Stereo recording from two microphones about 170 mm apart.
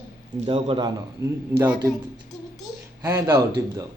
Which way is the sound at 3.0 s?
15° right (ahead or behind).